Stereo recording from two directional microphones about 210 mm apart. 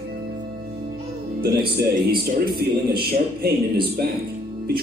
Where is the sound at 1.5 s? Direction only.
45° right (ahead or behind).